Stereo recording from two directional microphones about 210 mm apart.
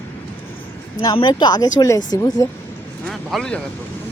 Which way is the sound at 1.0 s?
20° left (ahead or behind).